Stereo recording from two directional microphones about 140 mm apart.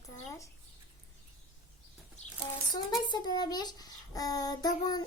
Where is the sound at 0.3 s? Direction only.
25° left (ahead or behind).